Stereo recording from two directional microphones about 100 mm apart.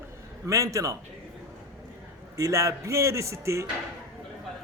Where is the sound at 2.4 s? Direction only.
30° right (ahead or behind).